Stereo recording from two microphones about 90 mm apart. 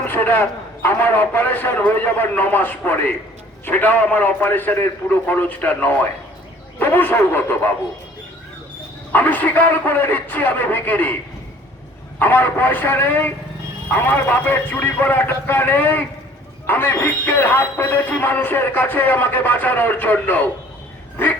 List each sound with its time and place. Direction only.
0.0 s speech: 20° left (ahead or behind)
9.1 s speech: 20° left (ahead or behind)
12.2 s speech: 20° left (ahead or behind)